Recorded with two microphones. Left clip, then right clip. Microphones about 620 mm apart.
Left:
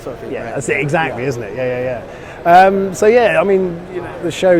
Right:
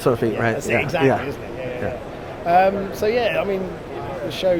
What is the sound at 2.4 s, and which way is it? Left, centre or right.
Speech, left.